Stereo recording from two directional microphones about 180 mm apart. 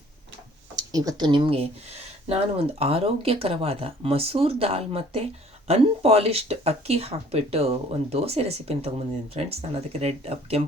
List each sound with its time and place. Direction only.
0.8 s speech: 20° right (ahead or behind)